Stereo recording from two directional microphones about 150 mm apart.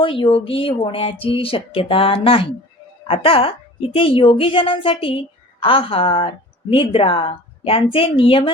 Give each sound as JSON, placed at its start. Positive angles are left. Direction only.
{"t": 0.0, "sound": "a woman's voice", "side_deg": 35}